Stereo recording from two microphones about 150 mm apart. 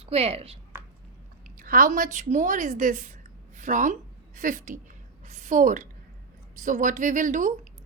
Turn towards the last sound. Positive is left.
turn(degrees=-60)  # may be behind; listen again after turning